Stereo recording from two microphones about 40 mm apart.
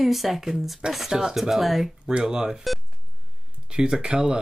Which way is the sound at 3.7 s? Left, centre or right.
Right.